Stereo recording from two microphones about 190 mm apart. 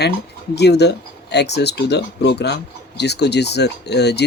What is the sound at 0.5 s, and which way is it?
Speech, 60° left (ahead or behind).